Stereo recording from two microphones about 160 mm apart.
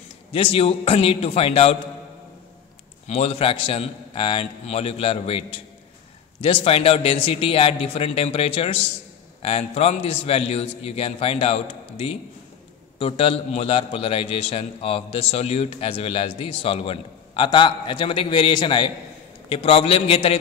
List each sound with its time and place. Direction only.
0.3 s a man's voice: 35° left (ahead or behind)
3.1 s a man's voice: 40° left (ahead or behind)